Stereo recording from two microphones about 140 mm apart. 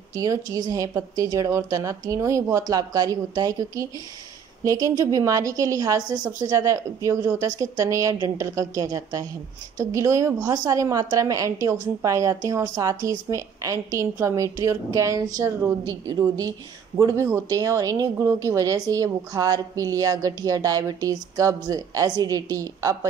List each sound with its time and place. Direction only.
0.1 s a woman's voice: 25° right (ahead or behind)